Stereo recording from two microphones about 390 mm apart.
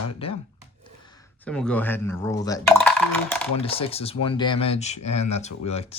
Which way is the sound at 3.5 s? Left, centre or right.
Centre.